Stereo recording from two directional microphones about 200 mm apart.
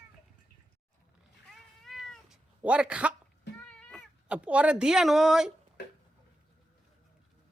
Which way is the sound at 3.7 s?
5° left (ahead or behind).